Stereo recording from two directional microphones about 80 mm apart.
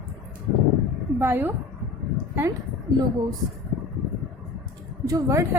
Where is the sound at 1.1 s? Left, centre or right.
Right.